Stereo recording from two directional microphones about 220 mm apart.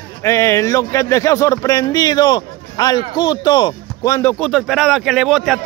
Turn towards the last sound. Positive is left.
turn(degrees=0)  # may be behind; listen again after turning